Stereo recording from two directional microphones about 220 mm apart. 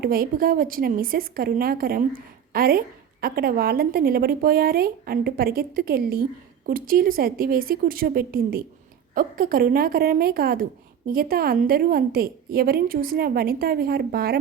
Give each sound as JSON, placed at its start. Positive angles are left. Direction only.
{"t": 0.0, "sound": "a woman's voice", "side_deg": -45}